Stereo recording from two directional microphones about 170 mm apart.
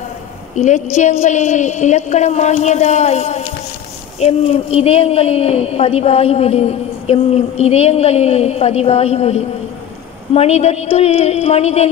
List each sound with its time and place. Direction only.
1.2 s a woman's voice: 45° left (ahead or behind)